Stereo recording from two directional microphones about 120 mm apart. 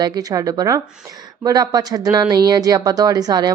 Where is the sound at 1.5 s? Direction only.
30° right (ahead or behind).